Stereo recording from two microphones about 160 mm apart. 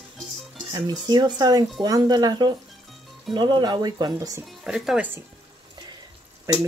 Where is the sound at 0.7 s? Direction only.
25° right (ahead or behind).